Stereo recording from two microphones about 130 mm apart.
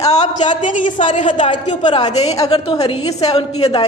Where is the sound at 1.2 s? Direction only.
40° left (ahead or behind).